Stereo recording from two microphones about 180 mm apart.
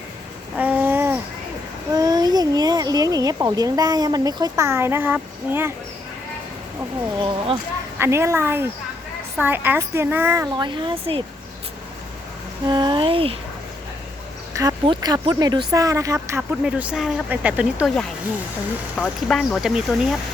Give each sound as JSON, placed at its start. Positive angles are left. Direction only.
{"t": 0.5, "sound": "babbling", "side_deg": -10}
{"t": 1.9, "sound": "speech", "side_deg": -20}
{"t": 7.2, "sound": "speech", "side_deg": -25}
{"t": 7.9, "sound": "speech", "side_deg": -15}
{"t": 10.6, "sound": "speech", "side_deg": -25}
{"t": 12.6, "sound": "speech", "side_deg": -25}
{"t": 14.6, "sound": "speech", "side_deg": -20}
{"t": 18.9, "sound": "speech", "side_deg": 5}